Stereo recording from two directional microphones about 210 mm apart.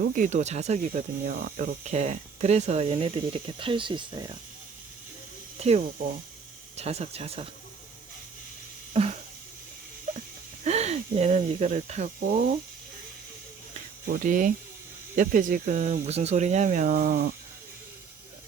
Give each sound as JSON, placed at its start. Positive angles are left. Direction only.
{"t": 0.2, "sound": "speech", "side_deg": -35}
{"t": 5.5, "sound": "speech", "side_deg": -30}
{"t": 8.9, "sound": "a sound", "side_deg": -30}
{"t": 10.6, "sound": "speech", "side_deg": -30}
{"t": 14.1, "sound": "speech", "side_deg": -40}